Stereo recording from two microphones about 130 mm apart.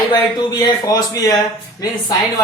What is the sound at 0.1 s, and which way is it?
A woman's voice, 30° left (ahead or behind).